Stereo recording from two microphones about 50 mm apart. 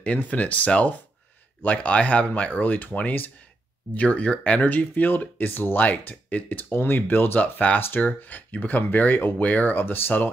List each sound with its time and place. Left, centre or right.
0.0 s speech: left
5.9 s speech: left
7.3 s speech: left